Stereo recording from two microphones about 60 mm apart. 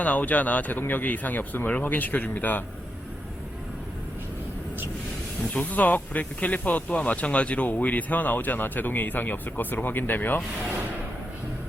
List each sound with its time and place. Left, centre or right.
0.0 s speech: left
5.5 s speech: left